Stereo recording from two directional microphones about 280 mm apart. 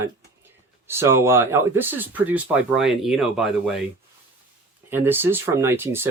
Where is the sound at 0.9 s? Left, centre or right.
Centre.